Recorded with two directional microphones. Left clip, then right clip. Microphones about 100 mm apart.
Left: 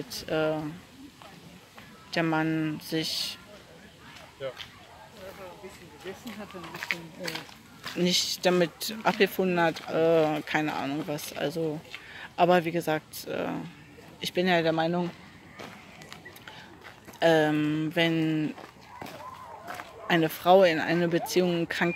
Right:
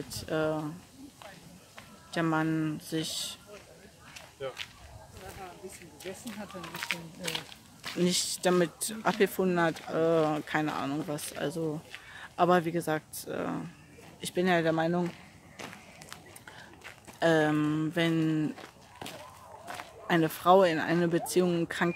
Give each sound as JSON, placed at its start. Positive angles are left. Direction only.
{"t": 0.1, "sound": "speech", "side_deg": -35}
{"t": 2.0, "sound": "speech", "side_deg": -30}
{"t": 6.6, "sound": "speech", "side_deg": 20}
{"t": 8.0, "sound": "speech", "side_deg": -40}
{"t": 15.0, "sound": "a sound", "side_deg": 5}
{"t": 17.2, "sound": "speech", "side_deg": -40}
{"t": 20.1, "sound": "speech", "side_deg": -40}